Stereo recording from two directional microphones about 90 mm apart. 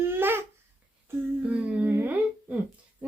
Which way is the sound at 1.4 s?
15° right (ahead or behind).